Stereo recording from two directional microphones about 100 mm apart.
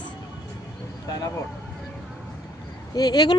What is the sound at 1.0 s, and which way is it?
Speech, 40° left (ahead or behind).